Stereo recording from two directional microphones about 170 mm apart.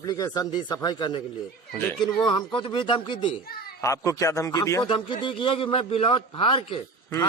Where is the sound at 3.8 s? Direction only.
20° left (ahead or behind).